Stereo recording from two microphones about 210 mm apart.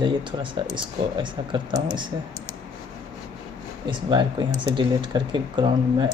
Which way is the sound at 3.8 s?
20° right (ahead or behind).